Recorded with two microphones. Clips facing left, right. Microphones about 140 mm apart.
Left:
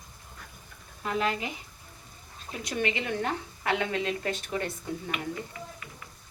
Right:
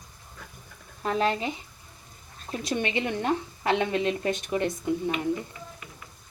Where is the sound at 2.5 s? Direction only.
25° right (ahead or behind).